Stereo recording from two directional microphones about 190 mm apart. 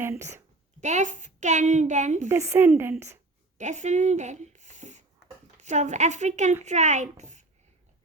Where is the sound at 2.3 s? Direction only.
15° right (ahead or behind).